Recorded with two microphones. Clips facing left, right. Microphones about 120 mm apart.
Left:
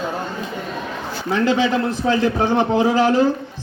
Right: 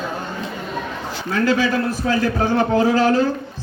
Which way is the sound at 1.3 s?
20° left (ahead or behind).